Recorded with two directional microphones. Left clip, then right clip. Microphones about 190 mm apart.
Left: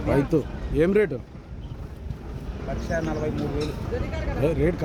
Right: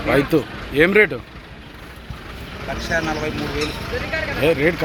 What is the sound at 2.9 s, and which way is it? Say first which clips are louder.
Speech: right 6 dB; 50° left (ahead or behind).